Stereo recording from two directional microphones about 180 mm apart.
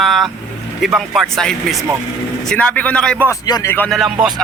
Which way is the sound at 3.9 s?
Centre (ahead or behind).